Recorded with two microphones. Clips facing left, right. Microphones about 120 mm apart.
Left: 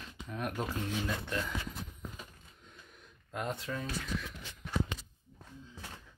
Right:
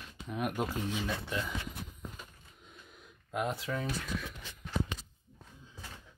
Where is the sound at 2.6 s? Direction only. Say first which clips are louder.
Right 2 dB; 10° right (ahead or behind).